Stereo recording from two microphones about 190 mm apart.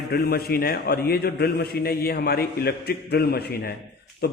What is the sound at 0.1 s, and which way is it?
A man's voice, 55° left (ahead or behind).